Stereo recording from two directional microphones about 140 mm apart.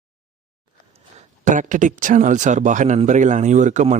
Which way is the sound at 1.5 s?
65° right (ahead or behind).